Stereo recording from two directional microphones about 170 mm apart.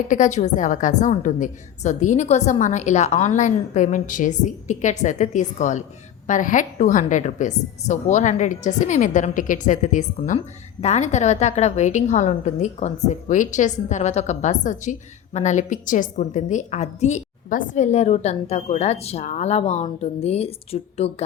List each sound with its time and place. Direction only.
0.1 s a woman's voice: 45° left (ahead or behind)